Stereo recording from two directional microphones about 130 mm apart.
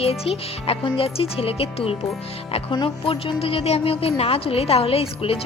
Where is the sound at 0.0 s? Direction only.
50° left (ahead or behind).